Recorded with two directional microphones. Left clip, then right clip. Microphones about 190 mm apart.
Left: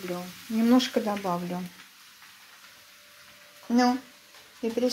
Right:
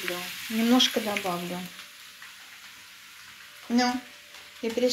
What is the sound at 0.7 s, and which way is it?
Speech, 15° left (ahead or behind).